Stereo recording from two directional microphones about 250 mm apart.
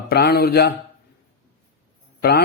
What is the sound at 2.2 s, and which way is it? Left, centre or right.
Speech, left.